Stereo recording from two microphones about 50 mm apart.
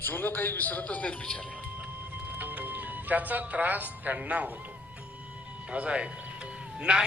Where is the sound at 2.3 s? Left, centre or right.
Right.